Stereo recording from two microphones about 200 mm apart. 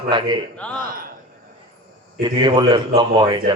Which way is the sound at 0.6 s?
5° left (ahead or behind).